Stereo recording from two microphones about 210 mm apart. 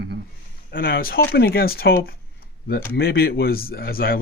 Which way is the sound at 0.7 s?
45° left (ahead or behind).